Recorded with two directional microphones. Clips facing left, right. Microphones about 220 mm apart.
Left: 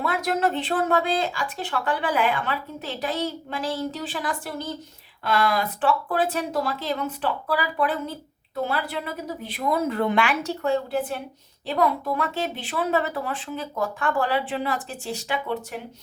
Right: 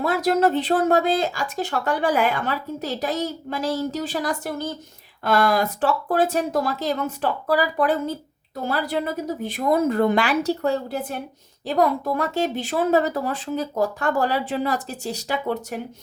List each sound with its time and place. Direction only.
0.0 s a woman's voice: 35° right (ahead or behind)